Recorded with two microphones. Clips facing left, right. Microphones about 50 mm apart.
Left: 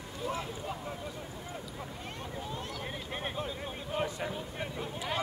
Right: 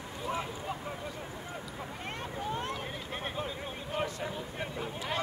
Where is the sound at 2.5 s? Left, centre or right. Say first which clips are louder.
Right 5 dB; right.